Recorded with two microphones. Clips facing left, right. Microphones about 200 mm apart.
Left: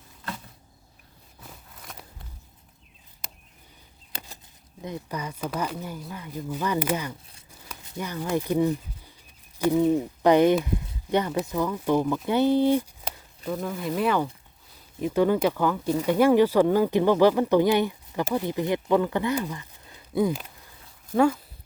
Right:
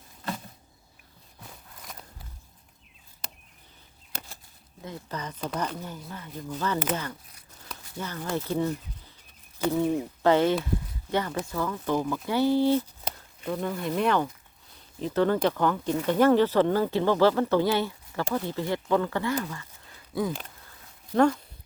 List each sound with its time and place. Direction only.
1.5 s a sound: centre (ahead or behind)
4.8 s speech: 15° left (ahead or behind)
12.2 s speech: 20° left (ahead or behind)
13.4 s speech: 5° left (ahead or behind); by 20.3 s 20° left (ahead or behind)
21.2 s speech: 5° left (ahead or behind)